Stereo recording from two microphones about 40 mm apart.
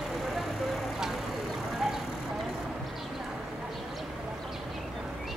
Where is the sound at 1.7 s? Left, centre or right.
Centre.